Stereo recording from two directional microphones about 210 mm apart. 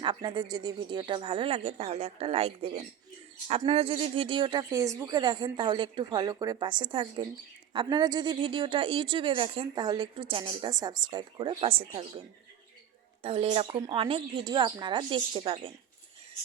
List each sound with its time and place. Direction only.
0.0 s speech: 25° right (ahead or behind)
13.2 s speech: 30° right (ahead or behind)